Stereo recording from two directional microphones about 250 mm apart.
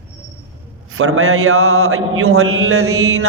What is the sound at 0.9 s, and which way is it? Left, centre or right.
A man's voice, right.